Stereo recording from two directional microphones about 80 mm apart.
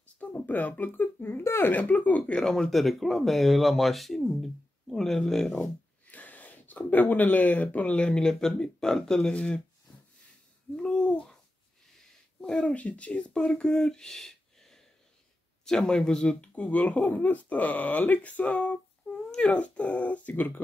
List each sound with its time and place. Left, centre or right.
0.2 s speech: left; by 5.7 s centre
6.0 s speech: left
10.8 s a sound: centre
12.0 s speech: centre